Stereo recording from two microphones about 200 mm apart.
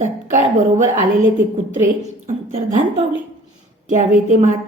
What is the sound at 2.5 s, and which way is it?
Speech, 30° right (ahead or behind).